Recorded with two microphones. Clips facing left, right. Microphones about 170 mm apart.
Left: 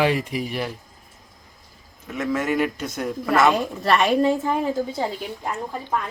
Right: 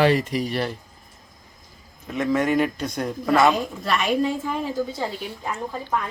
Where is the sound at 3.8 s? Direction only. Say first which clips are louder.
Left 3 dB; 65° left (ahead or behind).